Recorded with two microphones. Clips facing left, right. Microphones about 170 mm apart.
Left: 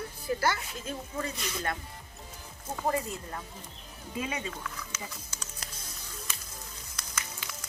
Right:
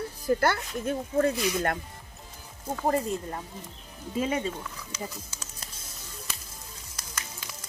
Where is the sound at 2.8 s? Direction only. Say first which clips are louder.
Right 4 dB; 40° right (ahead or behind).